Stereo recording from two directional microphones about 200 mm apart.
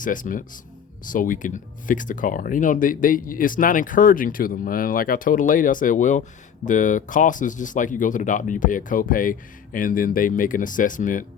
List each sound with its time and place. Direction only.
0.0 s speech: 40° left (ahead or behind)